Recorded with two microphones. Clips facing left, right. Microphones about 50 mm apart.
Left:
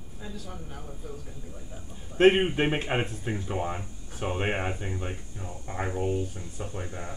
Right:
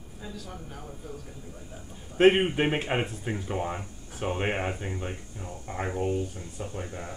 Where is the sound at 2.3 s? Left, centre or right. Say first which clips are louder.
Even; centre.